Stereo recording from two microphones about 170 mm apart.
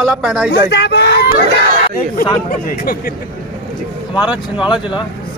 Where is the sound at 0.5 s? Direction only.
80° left.